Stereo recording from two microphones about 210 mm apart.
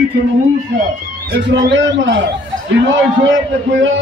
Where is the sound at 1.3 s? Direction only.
60° right (ahead or behind).